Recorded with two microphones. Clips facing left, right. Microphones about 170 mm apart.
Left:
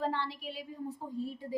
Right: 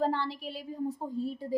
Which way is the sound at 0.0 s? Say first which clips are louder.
Right 4 dB; 35° right (ahead or behind).